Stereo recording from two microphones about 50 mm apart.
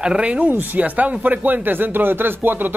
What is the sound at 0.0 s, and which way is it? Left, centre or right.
Speech, right.